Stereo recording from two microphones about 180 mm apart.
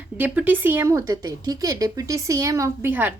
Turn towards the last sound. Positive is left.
turn(degrees=-10)  # may be behind; listen again after turning